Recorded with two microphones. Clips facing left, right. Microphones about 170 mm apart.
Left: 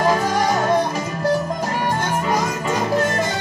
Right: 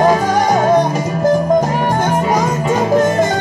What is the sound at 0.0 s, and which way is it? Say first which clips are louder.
Music: right 5 dB; 50° right (ahead or behind).